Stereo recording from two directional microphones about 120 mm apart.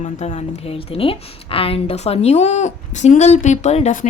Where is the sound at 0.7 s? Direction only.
50° left (ahead or behind).